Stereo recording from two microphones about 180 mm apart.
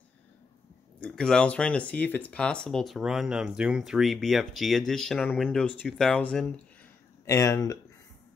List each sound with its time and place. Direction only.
1.0 s speech: 5° left (ahead or behind)
7.2 s speech: 15° left (ahead or behind)